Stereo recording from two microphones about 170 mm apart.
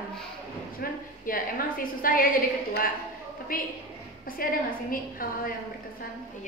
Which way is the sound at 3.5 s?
55° left (ahead or behind).